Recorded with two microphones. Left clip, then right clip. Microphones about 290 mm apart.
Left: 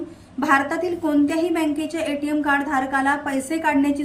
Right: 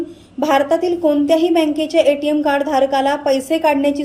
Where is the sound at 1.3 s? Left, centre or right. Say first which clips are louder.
Right 8 dB; left.